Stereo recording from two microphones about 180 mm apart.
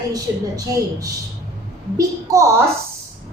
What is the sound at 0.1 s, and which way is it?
A woman's voice, 20° right (ahead or behind).